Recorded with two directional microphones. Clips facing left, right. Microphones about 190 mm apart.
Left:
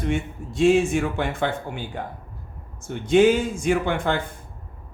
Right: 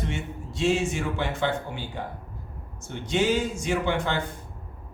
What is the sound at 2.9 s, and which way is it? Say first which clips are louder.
A man's voice: left 8 dB; 55° left (ahead or behind).